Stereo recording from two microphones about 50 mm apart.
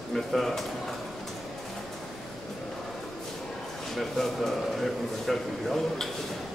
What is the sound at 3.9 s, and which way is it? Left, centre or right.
A man's voice, centre.